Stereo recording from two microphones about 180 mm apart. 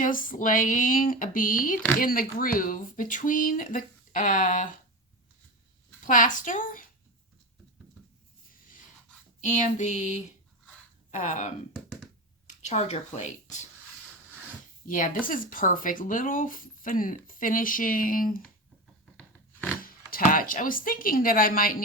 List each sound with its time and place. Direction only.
0.0 s speech: 50° left (ahead or behind)
6.1 s speech: 45° left (ahead or behind)
9.4 s a sound: 40° left (ahead or behind)
14.8 s speech: 45° left (ahead or behind)
19.8 s speech: 55° left (ahead or behind)